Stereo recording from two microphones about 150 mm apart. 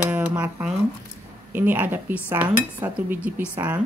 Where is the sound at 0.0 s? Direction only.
10° right (ahead or behind).